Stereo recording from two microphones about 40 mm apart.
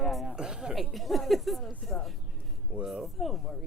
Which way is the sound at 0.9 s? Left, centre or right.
Centre.